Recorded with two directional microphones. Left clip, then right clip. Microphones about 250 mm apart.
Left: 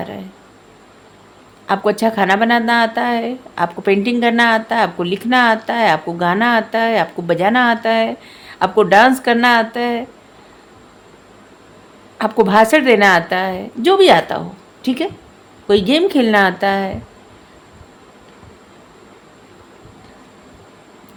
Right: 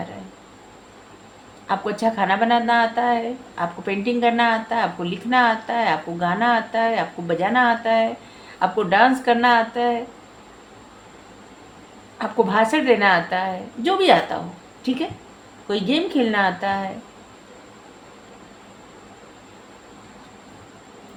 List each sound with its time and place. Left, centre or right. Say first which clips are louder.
1.6 s speech: left 6 dB; left
12.1 s speech: left 7 dB; left